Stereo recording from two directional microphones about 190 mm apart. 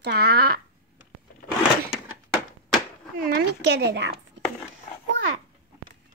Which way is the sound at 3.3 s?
60° right (ahead or behind).